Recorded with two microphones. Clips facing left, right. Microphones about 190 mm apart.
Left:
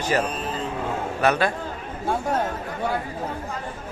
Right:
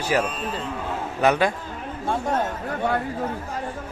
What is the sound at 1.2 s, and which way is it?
Speech, 15° right (ahead or behind).